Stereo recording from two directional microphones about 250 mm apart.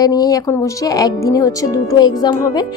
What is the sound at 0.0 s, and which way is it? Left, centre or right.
Speech, centre.